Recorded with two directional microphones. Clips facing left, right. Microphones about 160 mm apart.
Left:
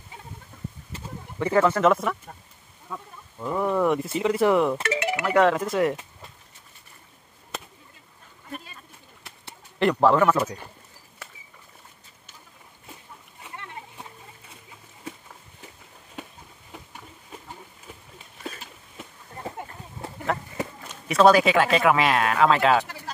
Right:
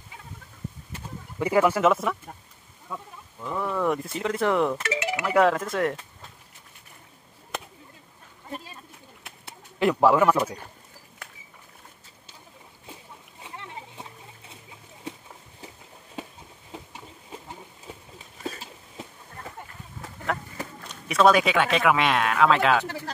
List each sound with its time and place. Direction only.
1.4 s speech: 10° right (ahead or behind)
3.3 s speech: 15° left (ahead or behind)
3.8 s speech: centre (ahead or behind)
4.8 s chink: 55° left (ahead or behind)
5.2 s speech: centre (ahead or behind)
8.5 s a sound: 30° right (ahead or behind)
9.8 s speech: 5° right (ahead or behind)
18.4 s a sound: 35° right (ahead or behind)
20.8 s speech: centre (ahead or behind)